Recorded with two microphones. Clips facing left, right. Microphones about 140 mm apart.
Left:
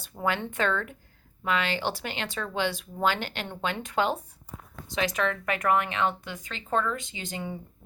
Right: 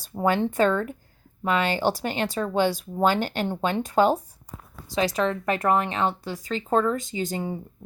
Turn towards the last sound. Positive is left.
turn(degrees=-35)  # may be behind; listen again after turning